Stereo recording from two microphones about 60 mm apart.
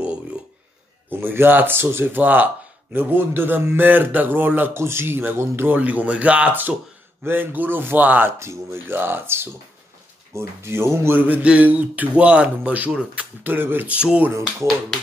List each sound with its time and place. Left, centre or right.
1.2 s speech: right
2.2 s speech: right
4.7 s speech: right
8.4 s speech: right
8.9 s speech: right
11.4 s speech: right
13.9 s speech: centre